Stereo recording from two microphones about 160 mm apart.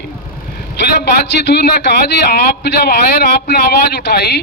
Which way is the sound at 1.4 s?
90° left.